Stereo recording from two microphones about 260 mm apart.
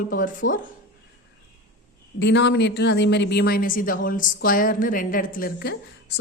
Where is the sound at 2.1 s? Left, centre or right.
Left.